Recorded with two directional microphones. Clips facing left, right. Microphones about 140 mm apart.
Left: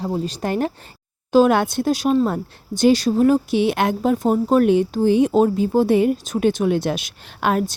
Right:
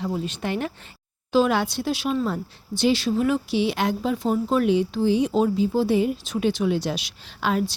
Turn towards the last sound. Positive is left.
turn(degrees=55)  # may be behind; listen again after turning